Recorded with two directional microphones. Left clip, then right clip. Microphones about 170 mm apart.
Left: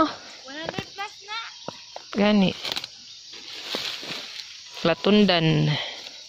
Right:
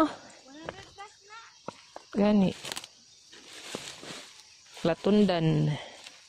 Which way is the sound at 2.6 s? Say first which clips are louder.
Left 9 dB; centre (ahead or behind).